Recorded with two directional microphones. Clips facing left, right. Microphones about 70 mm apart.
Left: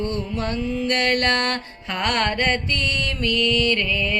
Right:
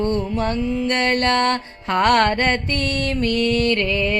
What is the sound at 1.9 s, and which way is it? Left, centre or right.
Mantra, right.